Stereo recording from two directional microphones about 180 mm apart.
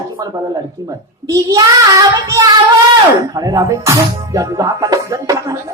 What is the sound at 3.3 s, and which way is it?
A man's voice, 20° right (ahead or behind).